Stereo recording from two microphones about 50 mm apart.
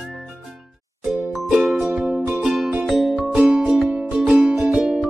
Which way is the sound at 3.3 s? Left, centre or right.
Centre.